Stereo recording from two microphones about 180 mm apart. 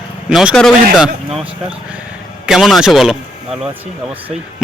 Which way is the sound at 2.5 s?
Centre (ahead or behind).